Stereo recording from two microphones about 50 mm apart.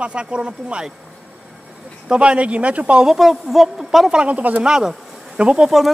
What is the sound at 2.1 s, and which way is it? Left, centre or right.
Speech, right.